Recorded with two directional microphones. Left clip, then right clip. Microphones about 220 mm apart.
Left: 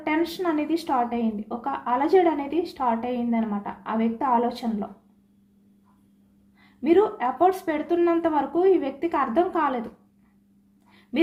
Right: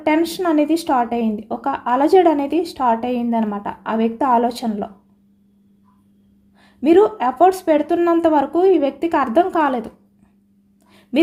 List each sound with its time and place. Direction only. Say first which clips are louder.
0.0 s speech: right 7 dB; 50° right (ahead or behind)
6.8 s speech: right 7 dB; 50° right (ahead or behind)